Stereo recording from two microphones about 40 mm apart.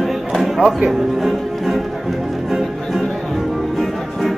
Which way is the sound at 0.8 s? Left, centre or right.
Centre.